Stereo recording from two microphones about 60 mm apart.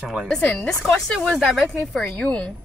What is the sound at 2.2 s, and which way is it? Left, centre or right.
Speech, left.